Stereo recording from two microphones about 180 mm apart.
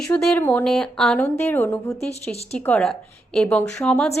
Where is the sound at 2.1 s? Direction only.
35° left (ahead or behind).